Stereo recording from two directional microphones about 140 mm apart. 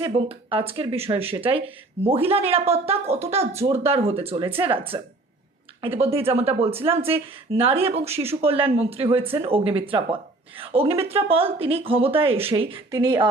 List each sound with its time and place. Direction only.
0.0 s a woman's voice: 40° right (ahead or behind)
6.0 s a woman's voice: 45° right (ahead or behind)
12.9 s speech: 25° right (ahead or behind)